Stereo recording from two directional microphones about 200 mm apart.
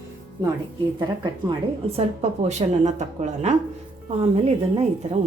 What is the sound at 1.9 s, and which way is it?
A woman's voice, 35° right (ahead or behind).